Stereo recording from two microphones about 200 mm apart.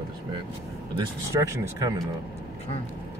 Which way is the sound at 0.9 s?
15° right (ahead or behind).